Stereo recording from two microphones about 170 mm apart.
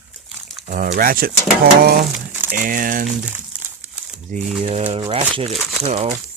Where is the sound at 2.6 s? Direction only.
50° right (ahead or behind).